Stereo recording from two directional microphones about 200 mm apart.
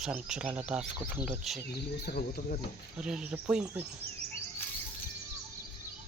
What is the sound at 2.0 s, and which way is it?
Cricket, 50° left (ahead or behind).